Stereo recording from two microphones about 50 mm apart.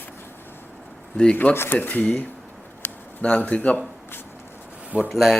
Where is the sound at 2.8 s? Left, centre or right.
Left.